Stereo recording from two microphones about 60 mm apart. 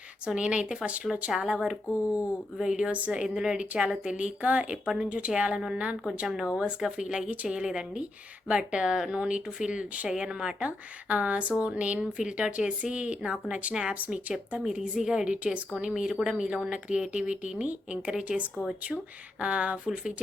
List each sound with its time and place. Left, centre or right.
0.3 s speech: centre
2.6 s speech: centre
6.2 s speech: centre
11.1 s speech: right
14.8 s speech: centre